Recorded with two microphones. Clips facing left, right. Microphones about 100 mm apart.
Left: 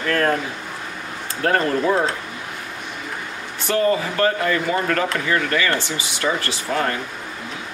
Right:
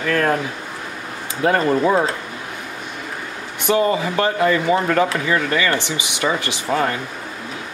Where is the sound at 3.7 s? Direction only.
15° right (ahead or behind).